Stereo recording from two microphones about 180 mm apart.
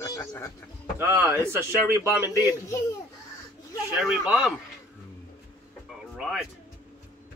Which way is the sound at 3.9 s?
5° right (ahead or behind).